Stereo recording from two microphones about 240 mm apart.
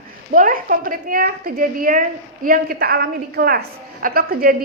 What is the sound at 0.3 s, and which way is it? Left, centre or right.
A woman's voice, right.